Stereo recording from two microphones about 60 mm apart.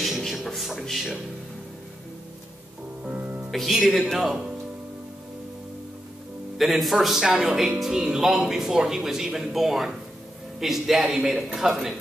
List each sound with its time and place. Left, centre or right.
0.0 s music: centre
3.0 s music: right
3.5 s a man's voice: centre
6.6 s a man's voice: centre